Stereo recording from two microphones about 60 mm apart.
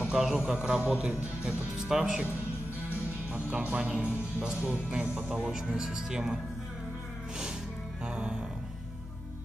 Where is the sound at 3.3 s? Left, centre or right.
Right.